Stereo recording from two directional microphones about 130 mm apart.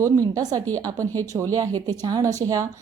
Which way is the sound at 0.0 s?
25° right (ahead or behind).